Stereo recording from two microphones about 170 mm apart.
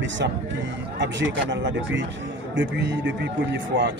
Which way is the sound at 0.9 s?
90° right.